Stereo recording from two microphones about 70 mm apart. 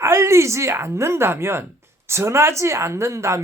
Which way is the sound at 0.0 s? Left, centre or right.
Right.